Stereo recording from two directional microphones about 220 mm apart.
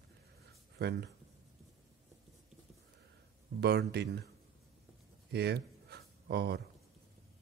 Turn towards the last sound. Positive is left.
turn(degrees=-50)  # may be behind; listen again after turning